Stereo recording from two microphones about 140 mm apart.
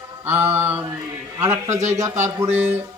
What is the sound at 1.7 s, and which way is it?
Speech, 55° right (ahead or behind).